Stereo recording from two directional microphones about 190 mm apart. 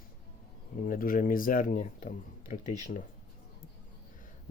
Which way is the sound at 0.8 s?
50° left (ahead or behind).